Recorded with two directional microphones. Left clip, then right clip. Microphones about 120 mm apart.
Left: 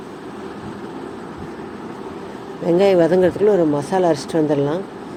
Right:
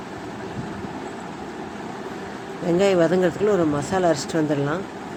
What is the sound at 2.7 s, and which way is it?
Speech, 20° left (ahead or behind).